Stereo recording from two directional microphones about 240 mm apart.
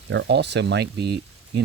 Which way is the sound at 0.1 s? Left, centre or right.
Right.